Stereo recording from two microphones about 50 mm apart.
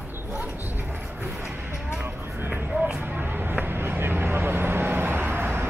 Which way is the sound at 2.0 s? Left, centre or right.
Right.